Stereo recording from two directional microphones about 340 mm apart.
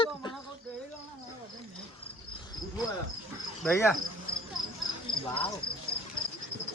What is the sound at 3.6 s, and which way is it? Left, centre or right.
Cricket, centre.